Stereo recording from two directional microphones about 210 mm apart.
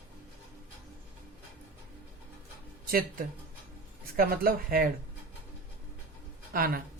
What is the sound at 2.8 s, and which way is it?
Speech, 45° right (ahead or behind).